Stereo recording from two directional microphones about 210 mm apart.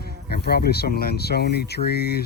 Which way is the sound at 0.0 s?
50° left (ahead or behind).